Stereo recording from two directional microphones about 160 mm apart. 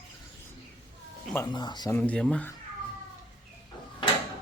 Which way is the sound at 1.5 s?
25° left (ahead or behind).